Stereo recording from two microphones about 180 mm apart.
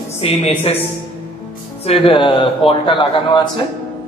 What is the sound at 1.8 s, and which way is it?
A man's voice, 30° left (ahead or behind).